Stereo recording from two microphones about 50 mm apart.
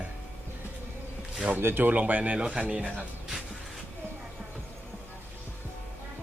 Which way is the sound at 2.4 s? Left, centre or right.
Centre.